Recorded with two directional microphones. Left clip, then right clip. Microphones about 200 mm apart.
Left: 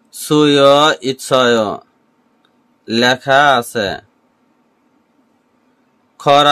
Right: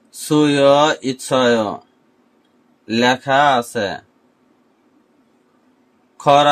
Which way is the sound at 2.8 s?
30° left (ahead or behind).